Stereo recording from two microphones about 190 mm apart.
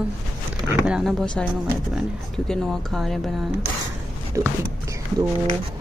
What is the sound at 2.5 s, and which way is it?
Speech, centre (ahead or behind).